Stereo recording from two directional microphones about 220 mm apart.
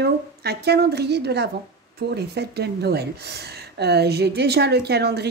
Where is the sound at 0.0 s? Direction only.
50° right (ahead or behind).